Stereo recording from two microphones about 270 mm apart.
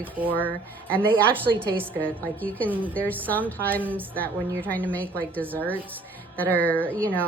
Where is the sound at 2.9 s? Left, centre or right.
Centre.